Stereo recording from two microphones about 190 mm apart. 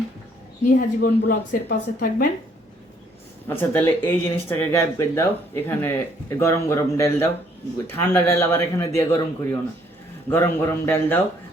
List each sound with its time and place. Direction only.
0.7 s a woman's voice: 50° left (ahead or behind)
3.5 s speech: 10° left (ahead or behind)